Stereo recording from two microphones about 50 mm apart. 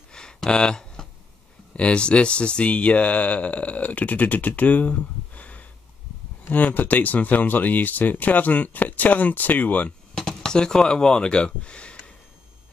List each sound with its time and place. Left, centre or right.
0.1 s a sound: centre
1.8 s speech: left
10.1 s speech: centre